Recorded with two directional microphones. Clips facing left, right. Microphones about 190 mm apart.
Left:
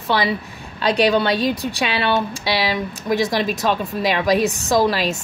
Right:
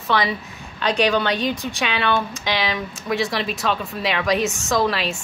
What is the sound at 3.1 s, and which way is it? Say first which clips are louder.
A woman's voice: left 4 dB; 40° left (ahead or behind).